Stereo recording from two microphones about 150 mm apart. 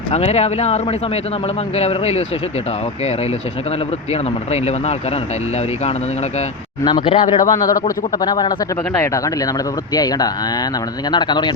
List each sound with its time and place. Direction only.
0.1 s speech: 45° left (ahead or behind)
4.1 s speech: 45° left (ahead or behind)
6.8 s speech: 30° left (ahead or behind)